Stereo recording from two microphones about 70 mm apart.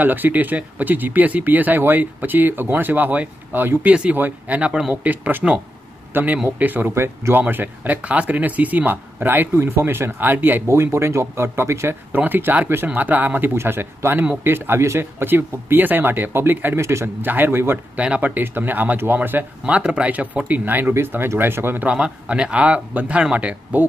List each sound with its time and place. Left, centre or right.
0.0 s speech: right
3.8 s speech: centre
10.7 s speech: right
12.1 s speech: right
17.9 s speech: centre
21.8 s speech: centre